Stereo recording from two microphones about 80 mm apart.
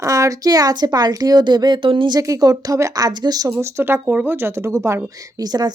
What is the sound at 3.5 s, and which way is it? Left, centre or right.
A woman's voice, right.